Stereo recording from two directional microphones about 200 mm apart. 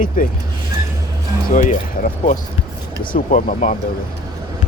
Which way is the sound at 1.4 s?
40° left (ahead or behind).